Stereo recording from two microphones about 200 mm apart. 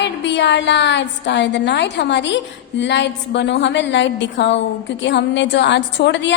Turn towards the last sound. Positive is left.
turn(degrees=60)  # may be behind; listen again after turning